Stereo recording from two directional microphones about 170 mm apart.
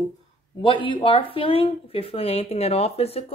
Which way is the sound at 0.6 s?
30° left (ahead or behind).